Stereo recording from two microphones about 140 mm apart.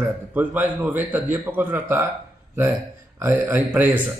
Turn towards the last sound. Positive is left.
turn(degrees=-15)  # may be behind; listen again after turning